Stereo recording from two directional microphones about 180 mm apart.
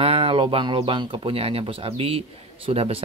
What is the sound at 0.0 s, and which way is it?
Speech, 30° right (ahead or behind).